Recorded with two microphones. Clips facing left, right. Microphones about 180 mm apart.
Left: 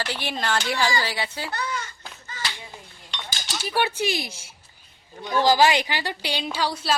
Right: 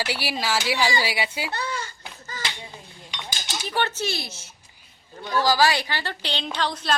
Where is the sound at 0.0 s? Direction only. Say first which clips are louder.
Right 1 dB; 10° right (ahead or behind).